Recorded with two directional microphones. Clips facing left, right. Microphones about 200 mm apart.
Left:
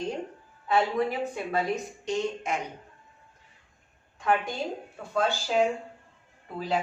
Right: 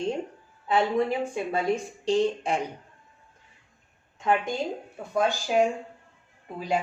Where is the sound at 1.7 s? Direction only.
30° right (ahead or behind).